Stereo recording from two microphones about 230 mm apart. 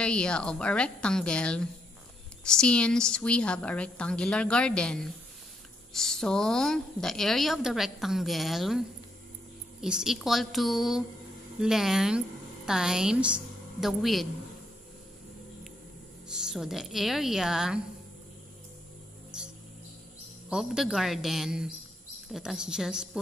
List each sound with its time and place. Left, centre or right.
0.0 s a woman's voice: centre
16.3 s a woman's voice: centre
20.4 s a woman's voice: centre